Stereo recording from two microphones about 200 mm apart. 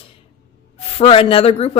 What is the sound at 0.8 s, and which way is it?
Speech, 30° left (ahead or behind).